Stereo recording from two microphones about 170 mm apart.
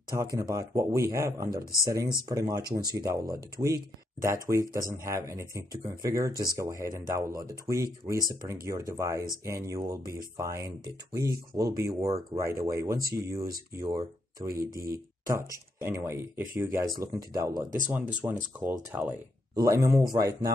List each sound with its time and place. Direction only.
0.1 s speech: 20° right (ahead or behind)